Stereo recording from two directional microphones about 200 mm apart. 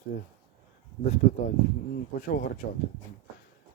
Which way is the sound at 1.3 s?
35° left (ahead or behind).